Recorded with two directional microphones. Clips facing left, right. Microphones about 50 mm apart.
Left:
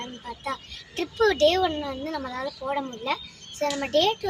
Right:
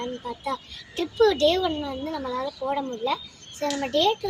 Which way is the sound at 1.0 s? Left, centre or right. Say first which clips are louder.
Right 1 dB; left.